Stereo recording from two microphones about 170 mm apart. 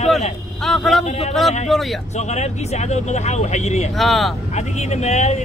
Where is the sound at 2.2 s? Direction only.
40° left (ahead or behind).